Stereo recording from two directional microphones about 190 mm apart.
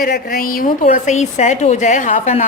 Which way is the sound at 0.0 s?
50° left (ahead or behind).